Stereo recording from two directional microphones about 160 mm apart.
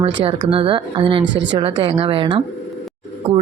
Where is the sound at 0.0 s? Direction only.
30° right (ahead or behind).